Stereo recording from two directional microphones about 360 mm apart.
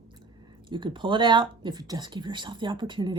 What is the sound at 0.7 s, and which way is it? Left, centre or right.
Speech, centre.